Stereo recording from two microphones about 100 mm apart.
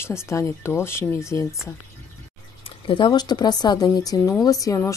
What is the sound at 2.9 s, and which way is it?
A woman's voice, 45° left (ahead or behind).